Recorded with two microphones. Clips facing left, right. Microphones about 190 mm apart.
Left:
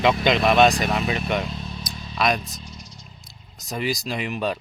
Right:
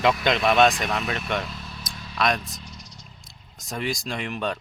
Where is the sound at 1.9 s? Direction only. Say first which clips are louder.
Left 3 dB; 15° left (ahead or behind).